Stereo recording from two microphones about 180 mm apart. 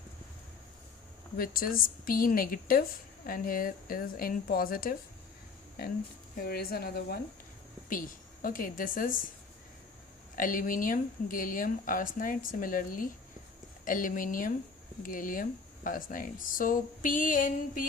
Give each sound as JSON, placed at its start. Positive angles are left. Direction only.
{"t": 1.4, "sound": "speech", "side_deg": 55}
{"t": 6.4, "sound": "speech", "side_deg": 60}
{"t": 7.9, "sound": "a woman's voice", "side_deg": 50}
{"t": 10.3, "sound": "speech", "side_deg": 50}